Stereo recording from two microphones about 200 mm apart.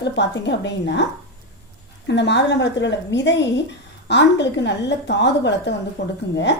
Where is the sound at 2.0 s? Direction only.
60° left (ahead or behind).